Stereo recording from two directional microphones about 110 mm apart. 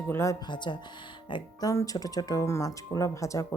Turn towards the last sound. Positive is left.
turn(degrees=30)  # may be behind; listen again after turning